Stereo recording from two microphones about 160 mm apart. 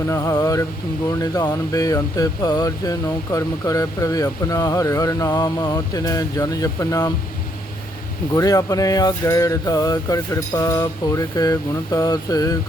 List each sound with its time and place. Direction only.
0.1 s speech: 20° left (ahead or behind)
8.3 s speech: 20° left (ahead or behind)